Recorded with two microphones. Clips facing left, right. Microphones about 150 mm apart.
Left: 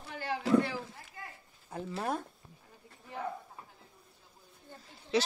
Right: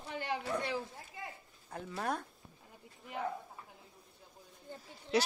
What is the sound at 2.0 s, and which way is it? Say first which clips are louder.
Speech: left 2 dB; 5° left (ahead or behind).